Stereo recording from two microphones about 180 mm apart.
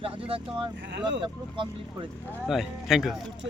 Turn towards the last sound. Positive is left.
turn(degrees=0)  # may be behind; listen again after turning